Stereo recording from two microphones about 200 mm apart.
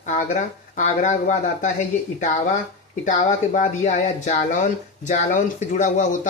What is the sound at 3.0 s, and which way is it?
Speech, 40° left (ahead or behind).